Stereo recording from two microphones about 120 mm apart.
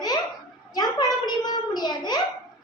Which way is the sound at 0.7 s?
35° left (ahead or behind).